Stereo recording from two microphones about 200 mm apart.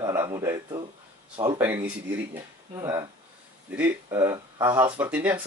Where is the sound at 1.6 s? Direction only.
10° right (ahead or behind).